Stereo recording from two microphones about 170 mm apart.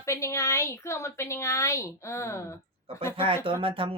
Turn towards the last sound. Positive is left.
turn(degrees=-30)  # may be behind; listen again after turning